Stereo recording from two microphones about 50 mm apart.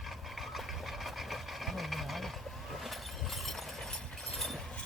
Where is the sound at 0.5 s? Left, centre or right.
Centre.